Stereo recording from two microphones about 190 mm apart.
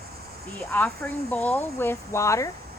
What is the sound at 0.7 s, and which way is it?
Speech, 10° left (ahead or behind).